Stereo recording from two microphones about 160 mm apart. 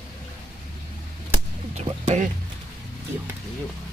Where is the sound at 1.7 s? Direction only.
45° right (ahead or behind).